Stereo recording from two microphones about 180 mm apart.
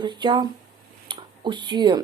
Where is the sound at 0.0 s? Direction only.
25° right (ahead or behind).